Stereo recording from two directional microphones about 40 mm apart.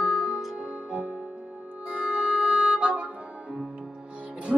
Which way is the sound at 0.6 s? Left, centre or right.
Right.